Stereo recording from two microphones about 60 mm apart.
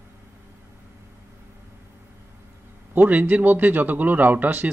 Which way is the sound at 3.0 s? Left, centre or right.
Right.